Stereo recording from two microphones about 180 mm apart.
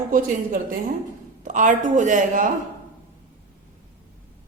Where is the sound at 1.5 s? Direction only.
45° right (ahead or behind).